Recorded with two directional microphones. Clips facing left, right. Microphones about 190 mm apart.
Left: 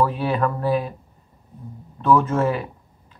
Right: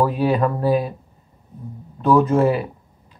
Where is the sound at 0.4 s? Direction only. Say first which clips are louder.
Right 3 dB; 35° right (ahead or behind).